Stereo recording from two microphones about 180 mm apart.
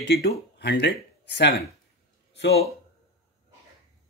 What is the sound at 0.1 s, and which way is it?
Speech, 65° left (ahead or behind).